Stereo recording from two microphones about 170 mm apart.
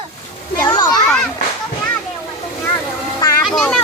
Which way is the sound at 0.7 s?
25° left (ahead or behind).